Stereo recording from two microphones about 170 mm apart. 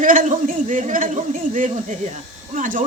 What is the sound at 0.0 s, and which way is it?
A man's voice, 50° right (ahead or behind).